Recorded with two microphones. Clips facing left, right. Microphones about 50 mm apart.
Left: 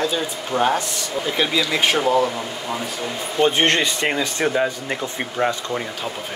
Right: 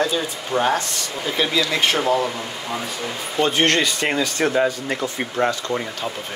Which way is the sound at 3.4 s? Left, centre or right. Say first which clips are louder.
Left 1 dB; left.